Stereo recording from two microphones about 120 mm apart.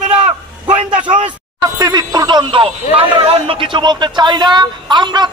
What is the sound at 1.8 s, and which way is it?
A man's voice, 35° right (ahead or behind).